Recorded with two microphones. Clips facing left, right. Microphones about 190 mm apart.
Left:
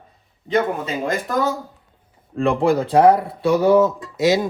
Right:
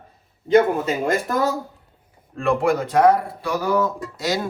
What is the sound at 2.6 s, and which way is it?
Speech, 30° left (ahead or behind).